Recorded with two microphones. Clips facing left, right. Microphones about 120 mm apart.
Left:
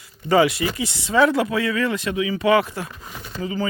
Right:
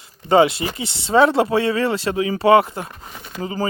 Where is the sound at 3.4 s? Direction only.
40° right (ahead or behind).